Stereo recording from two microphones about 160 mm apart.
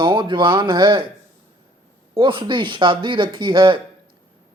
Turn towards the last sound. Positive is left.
turn(degrees=-30)  # may be behind; listen again after turning